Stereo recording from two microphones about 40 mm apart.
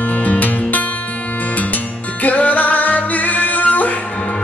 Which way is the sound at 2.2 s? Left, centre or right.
Left.